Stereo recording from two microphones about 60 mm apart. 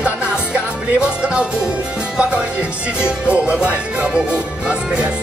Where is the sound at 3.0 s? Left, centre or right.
Centre.